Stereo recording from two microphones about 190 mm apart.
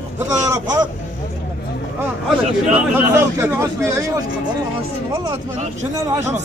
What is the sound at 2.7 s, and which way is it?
A man's voice, 10° right (ahead or behind).